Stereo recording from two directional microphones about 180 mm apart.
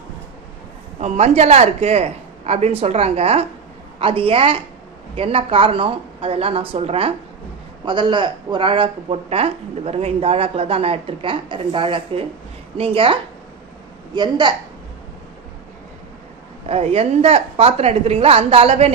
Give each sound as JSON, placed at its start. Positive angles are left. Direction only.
{"t": 0.9, "sound": "speech", "side_deg": -35}
{"t": 14.2, "sound": "a woman's voice", "side_deg": -25}
{"t": 16.6, "sound": "speech", "side_deg": -35}